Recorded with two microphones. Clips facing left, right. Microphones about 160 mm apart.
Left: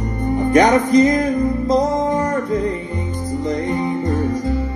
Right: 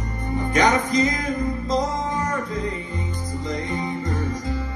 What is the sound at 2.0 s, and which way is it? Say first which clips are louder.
Music: left 7 dB; 35° left (ahead or behind).